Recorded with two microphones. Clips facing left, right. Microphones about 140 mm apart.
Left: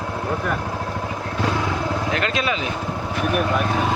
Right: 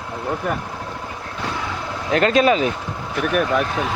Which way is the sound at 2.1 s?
40° right (ahead or behind).